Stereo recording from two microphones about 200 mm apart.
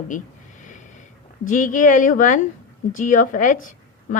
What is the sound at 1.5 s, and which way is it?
Speech, 40° left (ahead or behind).